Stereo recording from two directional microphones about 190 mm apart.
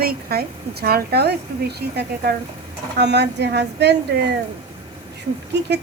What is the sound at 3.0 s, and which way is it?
Speech, 65° right (ahead or behind).